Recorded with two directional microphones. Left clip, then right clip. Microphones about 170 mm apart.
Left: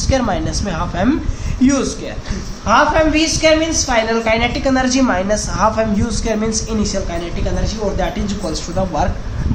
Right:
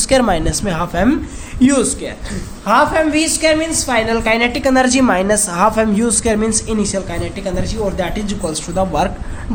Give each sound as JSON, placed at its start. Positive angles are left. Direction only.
{"t": 0.1, "sound": "a woman's voice", "side_deg": -45}